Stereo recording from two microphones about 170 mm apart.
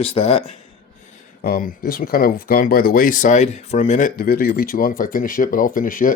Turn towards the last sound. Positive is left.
turn(degrees=55)  # may be behind; listen again after turning